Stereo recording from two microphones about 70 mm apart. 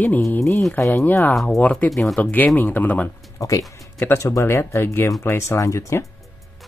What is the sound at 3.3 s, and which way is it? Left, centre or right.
Speech, left.